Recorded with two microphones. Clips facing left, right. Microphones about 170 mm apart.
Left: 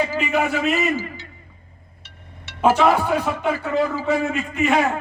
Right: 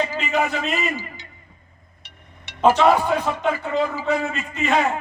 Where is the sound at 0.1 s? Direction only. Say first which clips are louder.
Left 2 dB; 15° right (ahead or behind).